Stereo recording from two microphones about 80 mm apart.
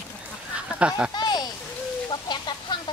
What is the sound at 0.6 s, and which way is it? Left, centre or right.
Speech, centre.